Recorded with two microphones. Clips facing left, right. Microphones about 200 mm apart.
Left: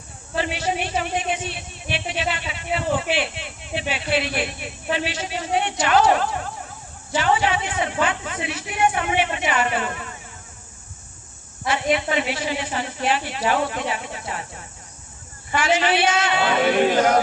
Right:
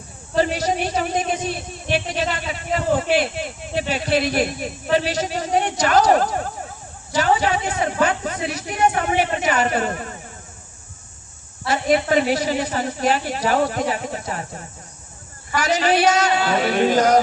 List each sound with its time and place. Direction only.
0.3 s a woman's voice: 40° right (ahead or behind)
11.7 s a woman's voice: 40° right (ahead or behind)